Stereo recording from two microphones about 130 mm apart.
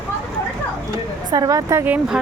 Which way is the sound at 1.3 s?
30° right (ahead or behind).